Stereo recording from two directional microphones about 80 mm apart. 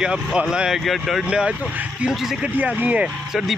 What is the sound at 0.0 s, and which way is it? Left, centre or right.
Speech, centre.